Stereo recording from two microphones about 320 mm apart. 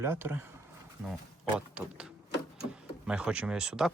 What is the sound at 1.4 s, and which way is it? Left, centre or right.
Speech, centre.